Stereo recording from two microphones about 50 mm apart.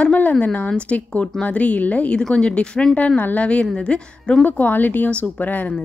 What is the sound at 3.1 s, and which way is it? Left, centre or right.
Speech, left.